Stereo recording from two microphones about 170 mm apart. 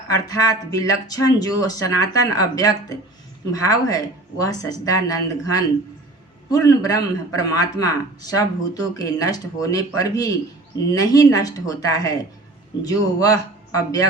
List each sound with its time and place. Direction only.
0.1 s a man's voice: 20° left (ahead or behind)